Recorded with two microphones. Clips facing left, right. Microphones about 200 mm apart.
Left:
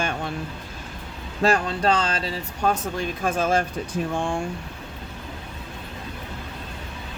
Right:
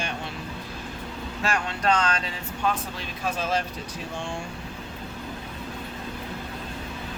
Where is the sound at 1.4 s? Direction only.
35° left (ahead or behind); by 4.4 s 55° left (ahead or behind).